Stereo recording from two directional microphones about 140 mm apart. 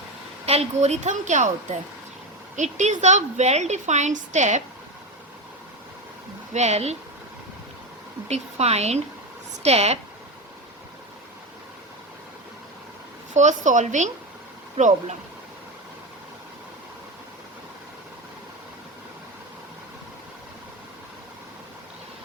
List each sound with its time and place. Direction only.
0.4 s a woman's voice: 50° right (ahead or behind)
2.6 s a woman's voice: 55° right (ahead or behind)
6.5 s speech: 55° right (ahead or behind)
8.3 s speech: 50° right (ahead or behind)
13.3 s a woman's voice: 60° right (ahead or behind)
14.8 s speech: 50° right (ahead or behind)